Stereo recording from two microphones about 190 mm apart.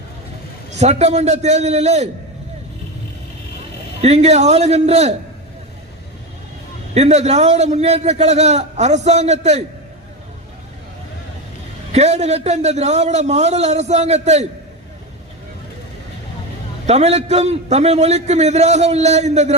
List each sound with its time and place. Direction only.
0.8 s a man's voice: 35° right (ahead or behind)
4.0 s a man's voice: 35° right (ahead or behind)
6.9 s a man's voice: 35° right (ahead or behind)
11.9 s a man's voice: 35° right (ahead or behind)
16.8 s a man's voice: 35° right (ahead or behind)